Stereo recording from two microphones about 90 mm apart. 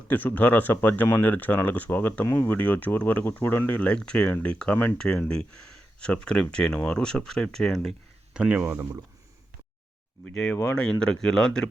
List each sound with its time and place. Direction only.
0.1 s speech: 20° left (ahead or behind)
8.3 s speech: 10° right (ahead or behind)
8.6 s speech: 30° right (ahead or behind)
10.2 s speech: 15° left (ahead or behind)